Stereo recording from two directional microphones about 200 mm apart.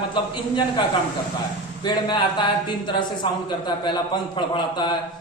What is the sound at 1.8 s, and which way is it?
Speech, 20° left (ahead or behind).